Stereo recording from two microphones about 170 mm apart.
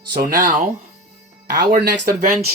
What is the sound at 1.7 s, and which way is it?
Speech, 60° right (ahead or behind).